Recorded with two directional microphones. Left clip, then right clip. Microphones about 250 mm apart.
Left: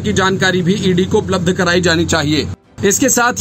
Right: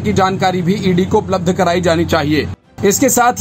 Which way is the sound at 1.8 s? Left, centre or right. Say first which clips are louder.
Right 1 dB; centre.